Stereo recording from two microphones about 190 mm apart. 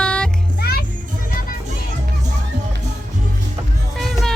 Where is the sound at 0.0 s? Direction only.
5° left (ahead or behind).